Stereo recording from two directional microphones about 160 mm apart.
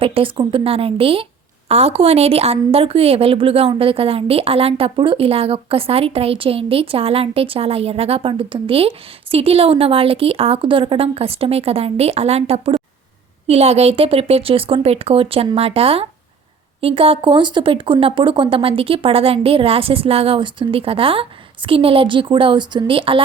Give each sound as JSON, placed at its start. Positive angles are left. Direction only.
{"t": 0.0, "sound": "a woman's voice", "side_deg": -35}